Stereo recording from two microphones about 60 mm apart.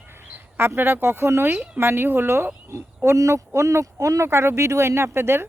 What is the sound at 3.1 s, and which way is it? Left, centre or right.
Speech, right.